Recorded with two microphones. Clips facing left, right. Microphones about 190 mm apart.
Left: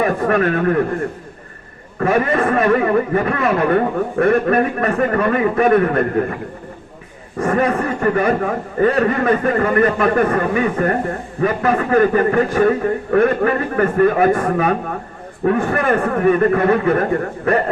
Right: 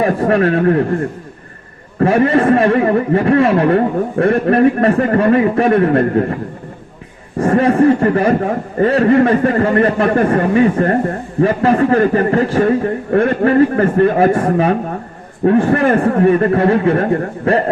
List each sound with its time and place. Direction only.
0.0 s a man's voice: 30° right (ahead or behind)
2.0 s a man's voice: 30° right (ahead or behind)
7.3 s a man's voice: 30° right (ahead or behind)